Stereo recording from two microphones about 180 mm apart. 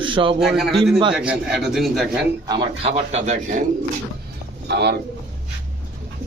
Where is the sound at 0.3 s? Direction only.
Centre (ahead or behind).